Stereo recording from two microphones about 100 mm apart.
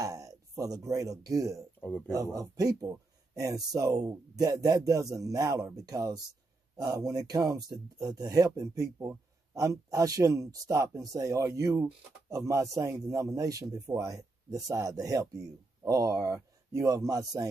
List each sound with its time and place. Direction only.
0.0 s a sound: 35° right (ahead or behind)
0.8 s speech: 35° right (ahead or behind)
1.8 s speech: 15° left (ahead or behind)
2.0 s speech: 35° right (ahead or behind)